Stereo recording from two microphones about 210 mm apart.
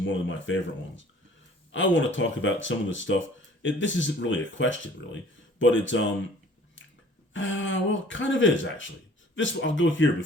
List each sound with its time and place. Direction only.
0.0 s speech: 65° left (ahead or behind)
1.7 s speech: 65° left (ahead or behind)
7.3 s speech: 65° left (ahead or behind)